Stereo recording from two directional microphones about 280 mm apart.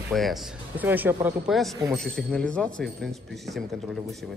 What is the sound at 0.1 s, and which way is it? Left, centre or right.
Speech, centre.